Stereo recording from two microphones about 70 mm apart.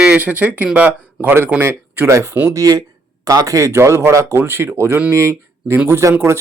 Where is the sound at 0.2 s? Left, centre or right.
Right.